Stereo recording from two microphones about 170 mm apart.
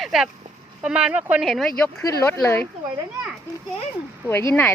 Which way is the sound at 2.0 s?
20° left (ahead or behind).